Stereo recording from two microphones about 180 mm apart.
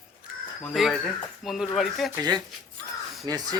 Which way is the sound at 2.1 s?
20° right (ahead or behind).